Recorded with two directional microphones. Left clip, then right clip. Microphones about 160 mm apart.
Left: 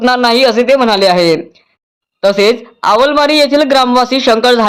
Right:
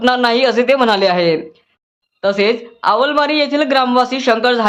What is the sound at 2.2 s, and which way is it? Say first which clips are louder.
Speech: left 5 dB; 40° left (ahead or behind).